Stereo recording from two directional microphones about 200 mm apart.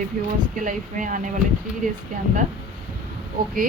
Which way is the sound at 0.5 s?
40° right (ahead or behind).